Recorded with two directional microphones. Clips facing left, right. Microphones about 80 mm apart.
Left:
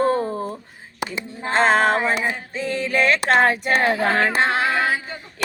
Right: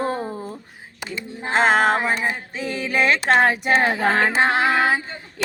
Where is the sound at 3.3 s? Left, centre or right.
Centre.